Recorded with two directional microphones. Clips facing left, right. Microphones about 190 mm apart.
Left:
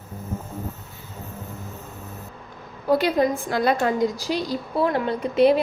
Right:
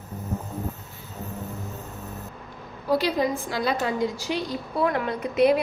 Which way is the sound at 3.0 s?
50° left (ahead or behind).